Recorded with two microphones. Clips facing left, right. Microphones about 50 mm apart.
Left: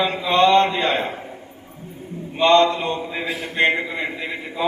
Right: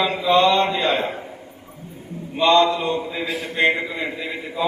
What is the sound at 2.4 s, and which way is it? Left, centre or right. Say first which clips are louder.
A man's voice: left 1 dB; left.